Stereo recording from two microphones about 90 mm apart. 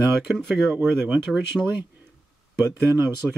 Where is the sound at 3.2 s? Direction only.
5° left (ahead or behind).